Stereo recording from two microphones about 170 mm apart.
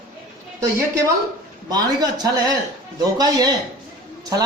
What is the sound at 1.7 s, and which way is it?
A man's voice, 25° right (ahead or behind).